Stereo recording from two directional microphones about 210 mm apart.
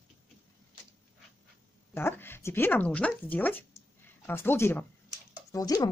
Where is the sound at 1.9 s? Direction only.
10° left (ahead or behind).